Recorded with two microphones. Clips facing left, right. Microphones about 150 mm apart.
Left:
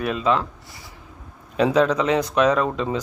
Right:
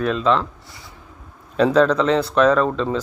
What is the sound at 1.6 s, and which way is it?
Speech, 10° left (ahead or behind).